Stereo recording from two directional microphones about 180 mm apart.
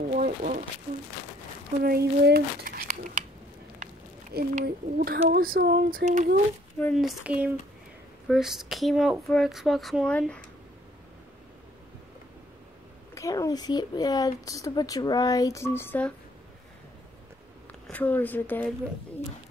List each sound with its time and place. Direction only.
0.1 s speech: 45° right (ahead or behind)
1.8 s speech: 60° right (ahead or behind)
3.8 s a sound: 60° right (ahead or behind)
4.6 s speech: 60° right (ahead or behind)
6.8 s speech: centre (ahead or behind)
13.1 s speech: 15° left (ahead or behind)
17.8 s speech: 10° left (ahead or behind)